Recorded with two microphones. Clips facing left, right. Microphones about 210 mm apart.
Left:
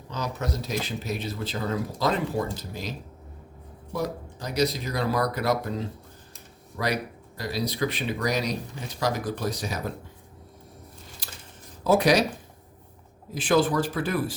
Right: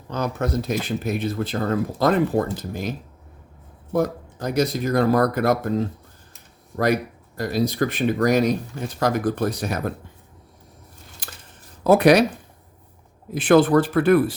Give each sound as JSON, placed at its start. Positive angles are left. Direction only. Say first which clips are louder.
{"t": 0.1, "sound": "speech", "louder": "right 7 dB", "side_deg": -55}
{"t": 3.9, "sound": "speech", "louder": "right 8 dB", "side_deg": -50}
{"t": 11.2, "sound": "a sound", "louder": "right 4 dB", "side_deg": -55}
{"t": 11.8, "sound": "speech", "louder": "right 6 dB", "side_deg": -60}
{"t": 13.3, "sound": "speech", "louder": "right 7 dB", "side_deg": -60}